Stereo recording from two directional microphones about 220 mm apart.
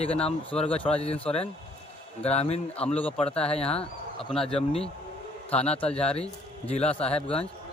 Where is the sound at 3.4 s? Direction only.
25° left (ahead or behind).